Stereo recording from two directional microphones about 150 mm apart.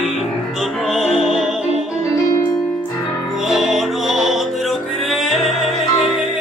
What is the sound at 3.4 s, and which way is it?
Music, centre (ahead or behind).